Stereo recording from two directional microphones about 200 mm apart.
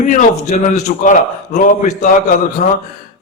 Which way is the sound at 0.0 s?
40° left (ahead or behind).